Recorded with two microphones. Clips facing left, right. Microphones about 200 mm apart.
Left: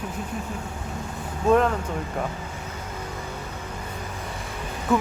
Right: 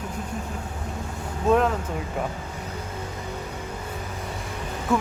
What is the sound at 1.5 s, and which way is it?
Speech, centre (ahead or behind).